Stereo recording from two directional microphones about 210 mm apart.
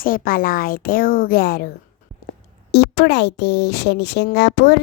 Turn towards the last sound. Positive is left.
turn(degrees=55)  # may be behind; listen again after turning